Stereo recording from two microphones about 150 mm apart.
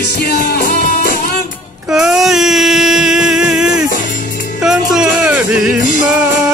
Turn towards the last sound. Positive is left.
turn(degrees=-5)  # may be behind; listen again after turning